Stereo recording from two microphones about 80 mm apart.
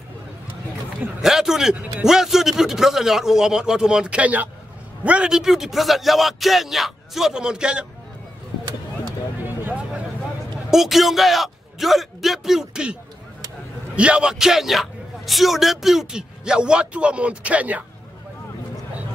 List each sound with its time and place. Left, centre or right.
1.2 s a man's voice: centre
9.4 s vehicle: right
10.7 s a man's voice: centre
13.9 s a man's voice: centre